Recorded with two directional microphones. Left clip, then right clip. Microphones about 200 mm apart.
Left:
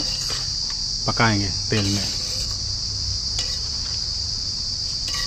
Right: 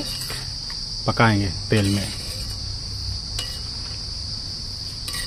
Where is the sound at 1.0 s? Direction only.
15° right (ahead or behind).